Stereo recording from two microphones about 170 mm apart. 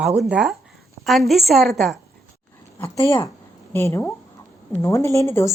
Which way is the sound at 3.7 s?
15° left (ahead or behind).